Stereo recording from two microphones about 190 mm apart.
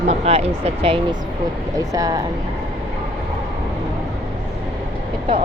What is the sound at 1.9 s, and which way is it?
Speech, 20° right (ahead or behind).